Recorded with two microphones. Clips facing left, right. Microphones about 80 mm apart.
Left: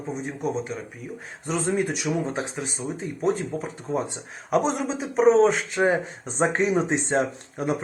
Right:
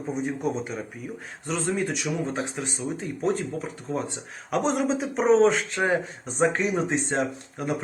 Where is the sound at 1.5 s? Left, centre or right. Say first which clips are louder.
Left 2 dB; centre.